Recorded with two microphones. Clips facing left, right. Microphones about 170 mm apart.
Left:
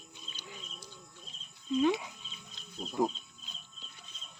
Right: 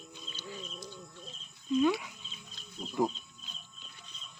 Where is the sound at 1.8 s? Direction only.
25° left (ahead or behind).